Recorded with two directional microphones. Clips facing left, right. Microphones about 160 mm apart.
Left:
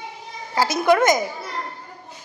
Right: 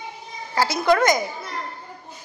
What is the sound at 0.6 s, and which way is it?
Speech, 15° left (ahead or behind).